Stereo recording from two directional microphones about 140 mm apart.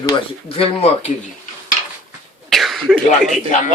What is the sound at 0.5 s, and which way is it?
Speech, 45° left (ahead or behind).